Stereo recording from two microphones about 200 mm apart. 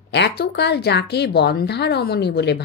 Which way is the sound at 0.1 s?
55° left (ahead or behind).